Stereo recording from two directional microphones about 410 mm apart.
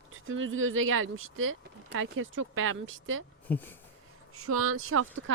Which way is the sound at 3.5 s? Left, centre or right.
Centre.